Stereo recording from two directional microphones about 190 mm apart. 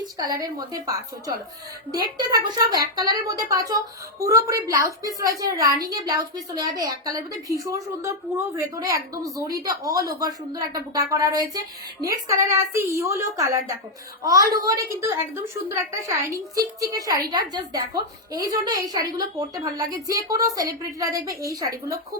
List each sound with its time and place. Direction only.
0.3 s a woman's voice: 20° right (ahead or behind)
8.5 s a woman's voice: 15° right (ahead or behind)